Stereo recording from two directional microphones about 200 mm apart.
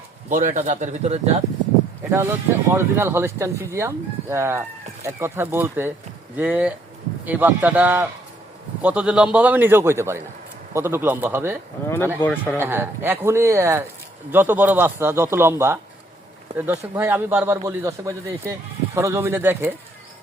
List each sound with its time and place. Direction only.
0.3 s speech: 40° right (ahead or behind)
2.0 s speech: 10° right (ahead or behind)
12.2 s a man's voice: 10° left (ahead or behind)
12.5 s speech: 10° right (ahead or behind)
16.9 s speech: 10° right (ahead or behind)